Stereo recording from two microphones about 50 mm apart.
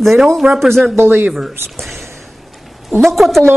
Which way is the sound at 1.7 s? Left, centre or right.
Centre.